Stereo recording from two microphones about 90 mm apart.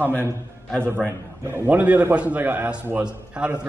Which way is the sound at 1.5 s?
20° right (ahead or behind).